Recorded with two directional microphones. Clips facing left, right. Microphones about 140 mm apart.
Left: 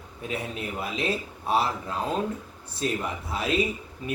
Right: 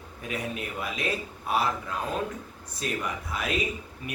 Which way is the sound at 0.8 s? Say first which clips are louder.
Left 3 dB; 30° left (ahead or behind).